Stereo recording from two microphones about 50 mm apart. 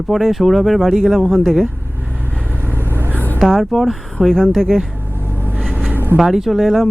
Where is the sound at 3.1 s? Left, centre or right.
Left.